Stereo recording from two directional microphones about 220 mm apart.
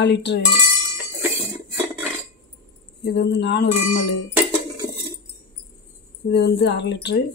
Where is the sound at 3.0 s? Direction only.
50° left (ahead or behind).